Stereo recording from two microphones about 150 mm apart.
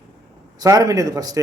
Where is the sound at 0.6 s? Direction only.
25° right (ahead or behind).